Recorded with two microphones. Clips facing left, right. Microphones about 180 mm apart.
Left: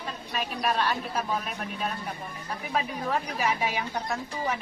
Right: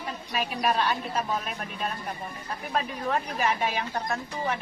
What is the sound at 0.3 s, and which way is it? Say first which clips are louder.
Speech: right 2 dB; centre (ahead or behind).